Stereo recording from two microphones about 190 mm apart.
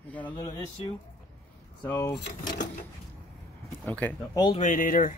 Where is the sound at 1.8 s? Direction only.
10° left (ahead or behind).